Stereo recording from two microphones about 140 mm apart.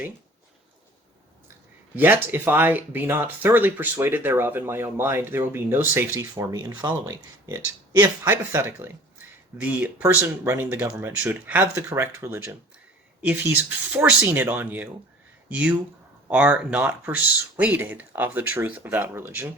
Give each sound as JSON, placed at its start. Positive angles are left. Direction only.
{"t": 2.0, "sound": "speech", "side_deg": -15}
{"t": 6.3, "sound": "speech", "side_deg": -25}